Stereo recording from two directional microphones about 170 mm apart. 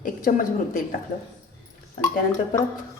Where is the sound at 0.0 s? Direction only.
50° left (ahead or behind).